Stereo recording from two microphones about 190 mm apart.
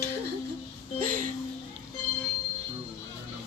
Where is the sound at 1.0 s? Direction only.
45° right (ahead or behind).